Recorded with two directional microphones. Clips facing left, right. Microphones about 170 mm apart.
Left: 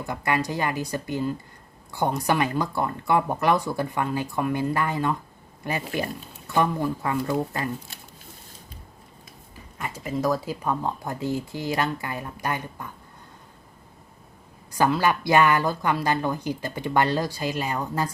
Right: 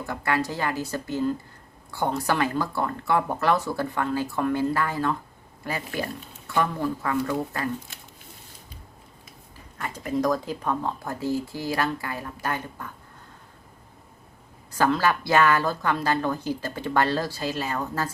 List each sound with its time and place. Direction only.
0.0 s a woman's voice: 15° left (ahead or behind)
9.7 s a woman's voice: 10° left (ahead or behind)
14.7 s a woman's voice: 15° left (ahead or behind)